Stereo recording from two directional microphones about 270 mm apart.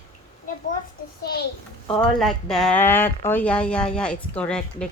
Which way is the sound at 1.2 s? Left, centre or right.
Left.